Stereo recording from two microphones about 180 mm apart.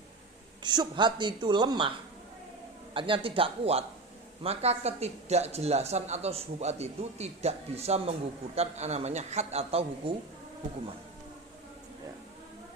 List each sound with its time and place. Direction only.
0.6 s a woman's voice: 25° right (ahead or behind)
2.9 s a man's voice: 30° right (ahead or behind)